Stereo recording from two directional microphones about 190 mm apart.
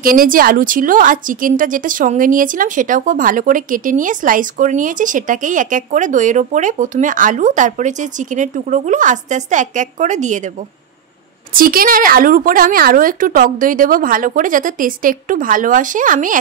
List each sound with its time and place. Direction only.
0.0 s a woman's voice: 50° right (ahead or behind)
11.5 s a woman's voice: 50° right (ahead or behind)